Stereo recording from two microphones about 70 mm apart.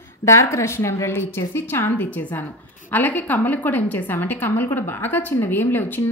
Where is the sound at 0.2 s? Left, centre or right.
Left.